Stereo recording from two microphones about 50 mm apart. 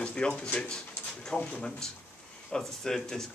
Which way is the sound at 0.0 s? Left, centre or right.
Centre.